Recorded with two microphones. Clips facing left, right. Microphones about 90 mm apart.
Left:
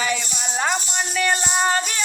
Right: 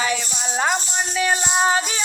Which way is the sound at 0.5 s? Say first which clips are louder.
Right 1 dB; 10° right (ahead or behind).